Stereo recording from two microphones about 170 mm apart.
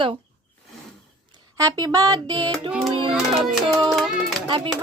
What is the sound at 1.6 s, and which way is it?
Speech, 20° right (ahead or behind).